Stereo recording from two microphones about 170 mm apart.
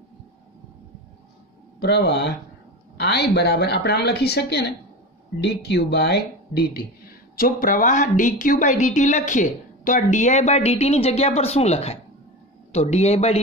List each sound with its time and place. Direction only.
1.8 s a woman's voice: 80° left; by 6.9 s 65° left (ahead or behind)
7.3 s a woman's voice: 55° left (ahead or behind); by 13.4 s 40° left (ahead or behind)